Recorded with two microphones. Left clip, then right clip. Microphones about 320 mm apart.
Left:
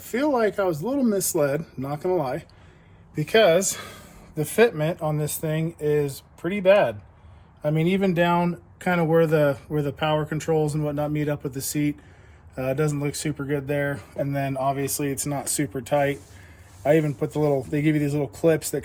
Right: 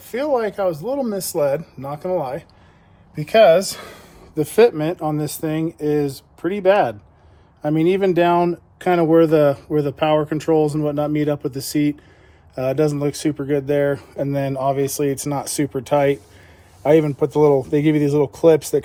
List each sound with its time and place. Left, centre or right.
0.0 s speech: centre
4.4 s speech: right